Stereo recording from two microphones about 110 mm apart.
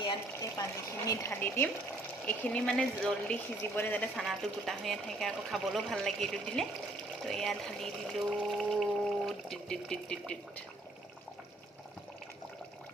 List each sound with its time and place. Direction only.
1.0 s speech: 30° left (ahead or behind); by 3.3 s 5° left (ahead or behind)
3.3 s speech: 20° left (ahead or behind)
4.2 s speech: centre (ahead or behind)